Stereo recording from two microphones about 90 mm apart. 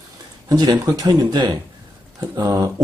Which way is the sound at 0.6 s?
45° right (ahead or behind).